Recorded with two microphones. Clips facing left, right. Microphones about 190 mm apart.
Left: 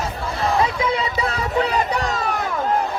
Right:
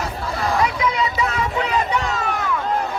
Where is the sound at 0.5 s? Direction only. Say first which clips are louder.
Even; 25° left (ahead or behind).